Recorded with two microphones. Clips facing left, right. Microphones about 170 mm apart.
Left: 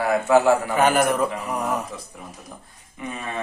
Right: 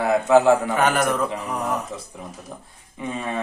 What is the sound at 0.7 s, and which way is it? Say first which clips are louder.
Speech: left 1 dB; 10° left (ahead or behind).